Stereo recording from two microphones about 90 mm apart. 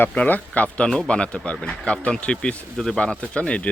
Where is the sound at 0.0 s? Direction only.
15° left (ahead or behind).